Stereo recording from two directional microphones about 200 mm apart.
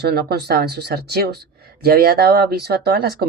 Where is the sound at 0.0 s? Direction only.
55° right (ahead or behind).